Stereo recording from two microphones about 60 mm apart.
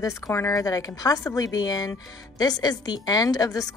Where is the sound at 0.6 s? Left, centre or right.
Left.